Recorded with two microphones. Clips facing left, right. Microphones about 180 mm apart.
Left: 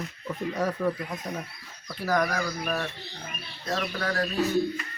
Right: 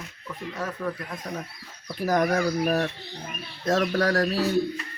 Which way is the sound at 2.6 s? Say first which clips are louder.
Right 6 dB; 40° right (ahead or behind).